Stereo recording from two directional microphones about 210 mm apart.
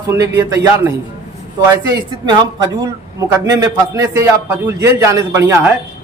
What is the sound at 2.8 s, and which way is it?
Speech, 15° right (ahead or behind).